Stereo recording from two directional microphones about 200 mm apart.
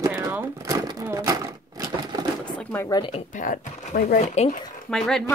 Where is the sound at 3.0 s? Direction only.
30° left (ahead or behind).